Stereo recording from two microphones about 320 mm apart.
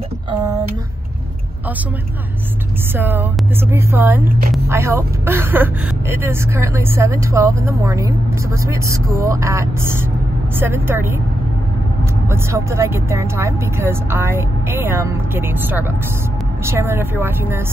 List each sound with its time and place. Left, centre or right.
3.0 s speech: centre
4.4 s a woman's voice: right
4.6 s speech: centre
12.3 s speech: centre